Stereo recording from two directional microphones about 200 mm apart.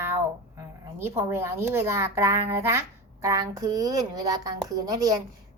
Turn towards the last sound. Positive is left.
turn(degrees=-15)  # may be behind; listen again after turning